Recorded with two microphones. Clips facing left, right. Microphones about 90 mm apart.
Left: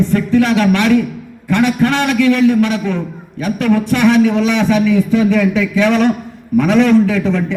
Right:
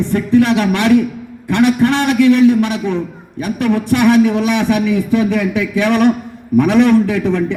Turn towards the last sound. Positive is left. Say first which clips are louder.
# even
turn(degrees=-15)  # may be behind; listen again after turning